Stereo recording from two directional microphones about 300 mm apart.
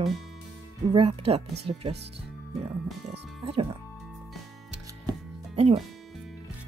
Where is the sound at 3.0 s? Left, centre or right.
Centre.